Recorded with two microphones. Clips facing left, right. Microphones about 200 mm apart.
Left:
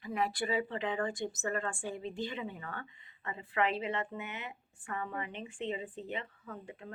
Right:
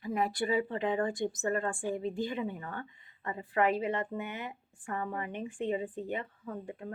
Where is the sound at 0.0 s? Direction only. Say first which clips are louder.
Right 3 dB; 45° right (ahead or behind).